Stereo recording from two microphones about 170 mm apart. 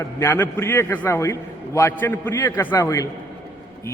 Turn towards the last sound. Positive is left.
turn(degrees=15)  # may be behind; listen again after turning